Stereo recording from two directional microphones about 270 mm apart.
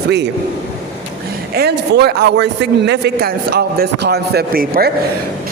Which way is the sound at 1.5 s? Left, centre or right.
Right.